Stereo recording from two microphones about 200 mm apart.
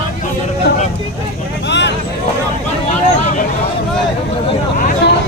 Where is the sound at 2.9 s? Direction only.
35° left (ahead or behind).